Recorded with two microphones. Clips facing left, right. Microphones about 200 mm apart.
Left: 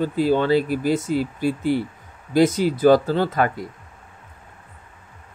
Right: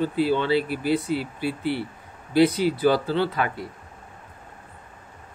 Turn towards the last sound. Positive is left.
turn(degrees=45)  # may be behind; listen again after turning